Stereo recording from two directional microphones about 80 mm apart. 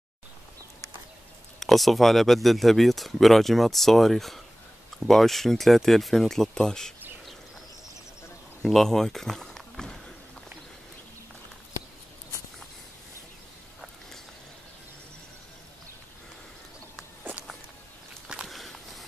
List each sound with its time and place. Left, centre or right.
1.6 s speech: centre
8.6 s speech: centre
17.2 s a sound: right
18.3 s walk: centre